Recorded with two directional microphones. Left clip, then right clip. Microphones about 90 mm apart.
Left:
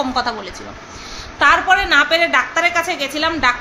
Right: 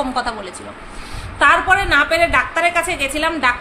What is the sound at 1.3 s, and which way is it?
A woman's voice, 5° left (ahead or behind).